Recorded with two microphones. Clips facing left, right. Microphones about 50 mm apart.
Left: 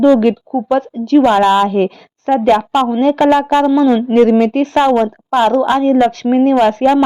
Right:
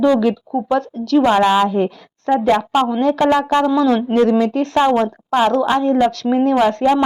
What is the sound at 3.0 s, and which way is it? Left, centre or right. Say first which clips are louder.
Speech: left 4 dB; left.